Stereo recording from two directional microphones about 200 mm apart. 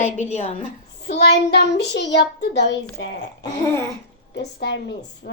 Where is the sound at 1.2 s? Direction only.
55° left (ahead or behind).